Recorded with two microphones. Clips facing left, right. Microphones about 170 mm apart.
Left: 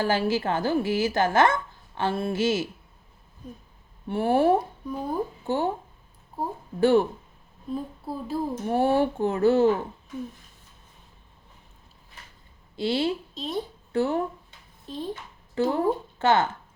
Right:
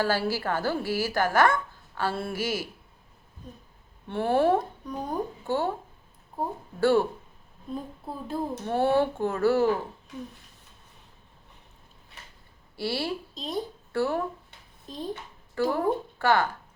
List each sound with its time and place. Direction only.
0.0 s a woman's voice: 20° left (ahead or behind)
4.1 s speech: 15° left (ahead or behind)
6.7 s speech: 20° left (ahead or behind)
7.7 s speech: 5° left (ahead or behind)
12.7 s a woman's voice: 20° left (ahead or behind)
13.3 s a woman's voice: centre (ahead or behind)
13.9 s speech: 20° left (ahead or behind)
14.8 s a child's voice: centre (ahead or behind)
15.5 s a woman's voice: 20° left (ahead or behind)